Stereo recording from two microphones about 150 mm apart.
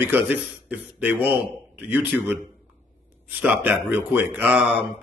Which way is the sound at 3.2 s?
10° right (ahead or behind).